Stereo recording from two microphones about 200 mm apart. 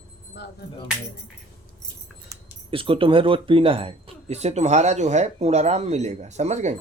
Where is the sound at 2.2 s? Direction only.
25° right (ahead or behind).